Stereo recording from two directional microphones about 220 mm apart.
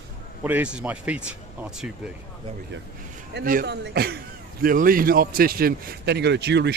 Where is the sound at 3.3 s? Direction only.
45° right (ahead or behind).